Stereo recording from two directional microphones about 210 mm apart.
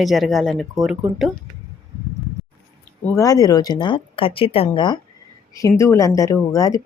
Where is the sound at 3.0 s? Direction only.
15° left (ahead or behind).